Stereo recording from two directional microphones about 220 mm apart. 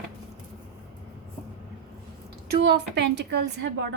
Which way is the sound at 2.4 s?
50° right (ahead or behind).